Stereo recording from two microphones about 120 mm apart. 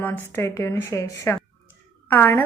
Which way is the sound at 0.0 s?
15° left (ahead or behind).